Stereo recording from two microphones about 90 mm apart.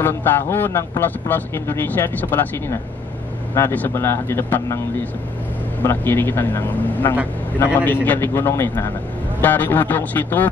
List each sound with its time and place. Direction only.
0.0 s a man's voice: 25° left (ahead or behind)
5.9 s a man's voice: 25° left (ahead or behind)